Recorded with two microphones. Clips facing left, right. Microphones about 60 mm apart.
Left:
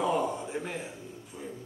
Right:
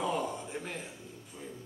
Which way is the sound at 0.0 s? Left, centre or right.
Centre.